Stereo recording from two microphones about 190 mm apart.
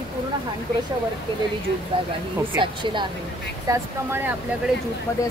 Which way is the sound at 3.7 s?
10° right (ahead or behind).